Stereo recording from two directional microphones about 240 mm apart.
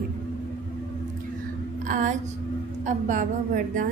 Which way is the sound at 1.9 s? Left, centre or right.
Right.